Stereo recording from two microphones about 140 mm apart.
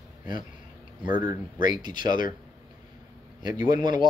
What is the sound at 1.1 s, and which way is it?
Speech, 75° left (ahead or behind).